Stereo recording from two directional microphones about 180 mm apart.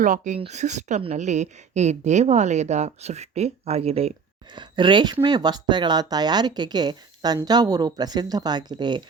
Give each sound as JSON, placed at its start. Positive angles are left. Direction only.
{"t": 0.0, "sound": "a woman's voice", "side_deg": -45}